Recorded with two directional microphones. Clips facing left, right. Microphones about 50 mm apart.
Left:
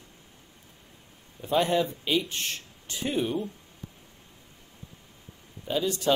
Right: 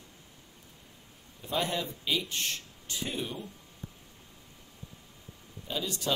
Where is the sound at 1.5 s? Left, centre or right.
Left.